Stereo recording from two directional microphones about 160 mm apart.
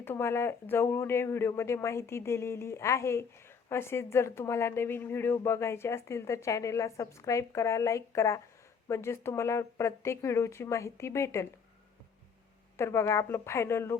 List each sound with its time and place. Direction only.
0.0 s speech: 15° left (ahead or behind)
12.7 s speech: 15° left (ahead or behind)